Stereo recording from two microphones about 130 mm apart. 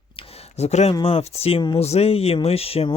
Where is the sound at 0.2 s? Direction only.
55° left (ahead or behind).